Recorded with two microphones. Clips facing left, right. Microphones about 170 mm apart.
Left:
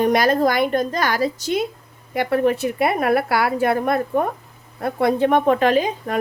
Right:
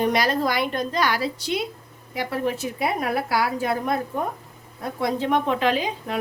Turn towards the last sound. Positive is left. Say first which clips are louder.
# left 5 dB
turn(degrees=45)  # may be behind; listen again after turning